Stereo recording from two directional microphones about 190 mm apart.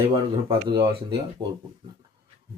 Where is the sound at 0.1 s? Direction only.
25° right (ahead or behind).